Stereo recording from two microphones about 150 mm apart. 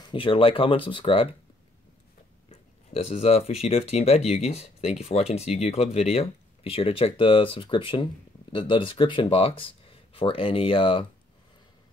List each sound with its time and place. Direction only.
0.0 s speech: 35° left (ahead or behind)
2.5 s speech: 40° left (ahead or behind)